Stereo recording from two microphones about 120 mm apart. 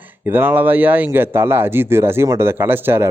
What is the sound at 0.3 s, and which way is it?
A man's voice, 15° right (ahead or behind).